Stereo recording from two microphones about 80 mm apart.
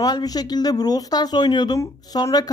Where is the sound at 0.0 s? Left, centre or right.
Left.